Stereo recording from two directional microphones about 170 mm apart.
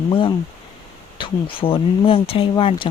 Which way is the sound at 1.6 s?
35° left (ahead or behind).